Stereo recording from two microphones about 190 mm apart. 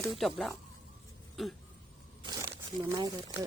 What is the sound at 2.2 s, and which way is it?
Crumpling, 25° right (ahead or behind).